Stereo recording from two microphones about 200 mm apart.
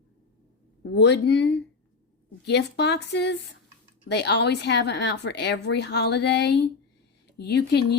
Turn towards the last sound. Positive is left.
turn(degrees=55)  # may be behind; listen again after turning